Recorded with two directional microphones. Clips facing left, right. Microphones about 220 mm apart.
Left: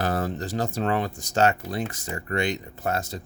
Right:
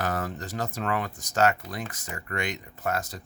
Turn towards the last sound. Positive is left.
turn(degrees=25)  # may be behind; listen again after turning